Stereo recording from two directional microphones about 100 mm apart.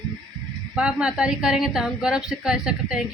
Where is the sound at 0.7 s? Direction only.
10° right (ahead or behind).